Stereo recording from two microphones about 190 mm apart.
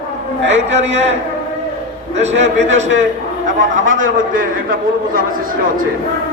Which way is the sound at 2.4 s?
35° right (ahead or behind).